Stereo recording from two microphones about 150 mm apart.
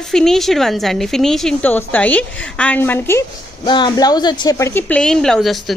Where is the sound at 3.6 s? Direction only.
30° left (ahead or behind); by 5.8 s centre (ahead or behind).